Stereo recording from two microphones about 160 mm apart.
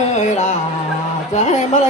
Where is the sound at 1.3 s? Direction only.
45° left (ahead or behind).